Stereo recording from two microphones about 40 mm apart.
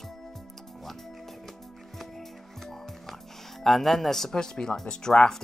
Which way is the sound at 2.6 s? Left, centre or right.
Centre.